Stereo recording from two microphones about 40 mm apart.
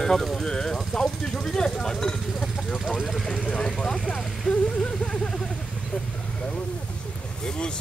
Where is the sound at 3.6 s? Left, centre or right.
Centre.